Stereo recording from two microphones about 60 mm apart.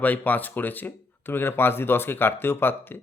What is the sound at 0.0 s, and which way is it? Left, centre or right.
Speech, left.